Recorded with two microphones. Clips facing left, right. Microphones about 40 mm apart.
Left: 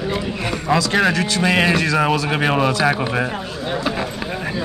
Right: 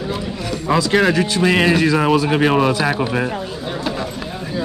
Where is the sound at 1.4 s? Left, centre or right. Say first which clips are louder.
Right 2 dB; centre.